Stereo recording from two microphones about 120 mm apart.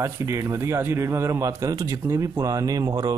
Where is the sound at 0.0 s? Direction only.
25° right (ahead or behind).